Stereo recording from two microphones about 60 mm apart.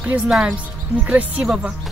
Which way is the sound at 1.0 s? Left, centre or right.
Right.